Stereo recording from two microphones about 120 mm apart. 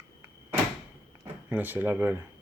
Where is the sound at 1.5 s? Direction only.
15° right (ahead or behind).